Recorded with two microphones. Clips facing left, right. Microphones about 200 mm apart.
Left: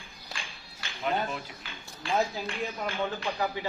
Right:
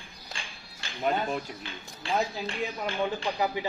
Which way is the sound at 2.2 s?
Centre (ahead or behind).